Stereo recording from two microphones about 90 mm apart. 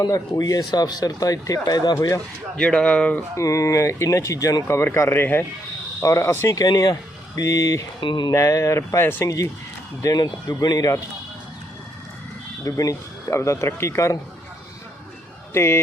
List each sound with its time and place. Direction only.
0.0 s speech: 40° left (ahead or behind)
2.6 s speech: 10° left (ahead or behind)
3.3 s speech: 35° left (ahead or behind)
6.0 s speech: 35° left (ahead or behind)
8.0 s speech: 60° left (ahead or behind)
8.3 s speech: 35° left (ahead or behind)
9.2 s speech: 40° left (ahead or behind)
12.6 s speech: 40° left (ahead or behind)
15.5 s speech: 25° left (ahead or behind)